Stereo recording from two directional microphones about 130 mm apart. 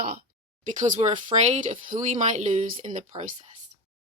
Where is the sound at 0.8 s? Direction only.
65° right (ahead or behind).